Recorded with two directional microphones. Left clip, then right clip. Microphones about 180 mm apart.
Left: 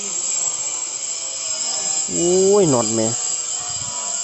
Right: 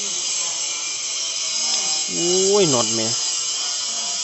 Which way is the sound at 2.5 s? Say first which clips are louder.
Left 2 dB; 25° left (ahead or behind).